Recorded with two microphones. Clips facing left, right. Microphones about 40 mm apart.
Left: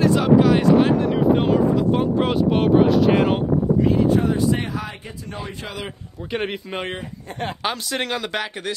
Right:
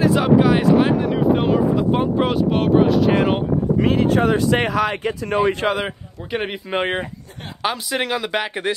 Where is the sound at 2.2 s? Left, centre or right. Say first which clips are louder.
Even; centre.